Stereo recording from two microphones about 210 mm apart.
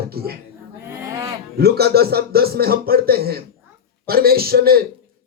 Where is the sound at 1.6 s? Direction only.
50° right (ahead or behind).